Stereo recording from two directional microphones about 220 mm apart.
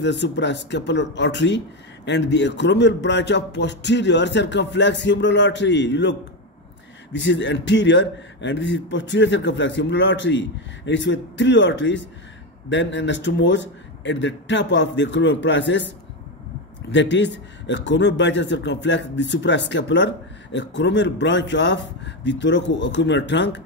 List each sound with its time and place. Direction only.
0.0 s a man's voice: 55° left (ahead or behind)
16.9 s speech: 55° left (ahead or behind)